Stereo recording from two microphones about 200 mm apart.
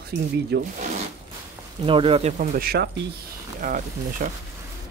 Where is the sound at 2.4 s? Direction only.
50° right (ahead or behind).